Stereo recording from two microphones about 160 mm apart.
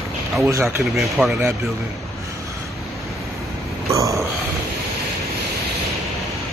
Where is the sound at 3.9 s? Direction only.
20° right (ahead or behind).